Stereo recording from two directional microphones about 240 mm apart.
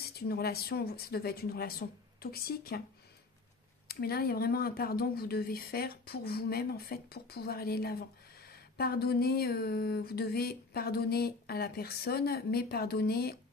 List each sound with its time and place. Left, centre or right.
0.3 s speech: left
3.8 s speech: left